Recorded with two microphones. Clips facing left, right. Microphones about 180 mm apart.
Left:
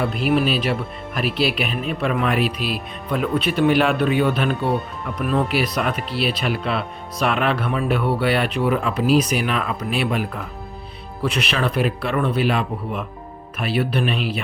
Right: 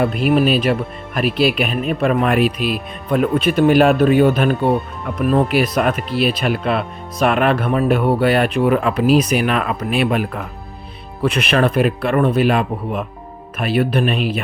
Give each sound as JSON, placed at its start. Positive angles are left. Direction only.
{"t": 0.0, "sound": "speech", "side_deg": -50}